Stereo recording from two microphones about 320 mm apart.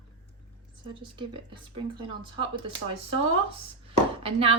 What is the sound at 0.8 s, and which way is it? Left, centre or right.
Speech, centre.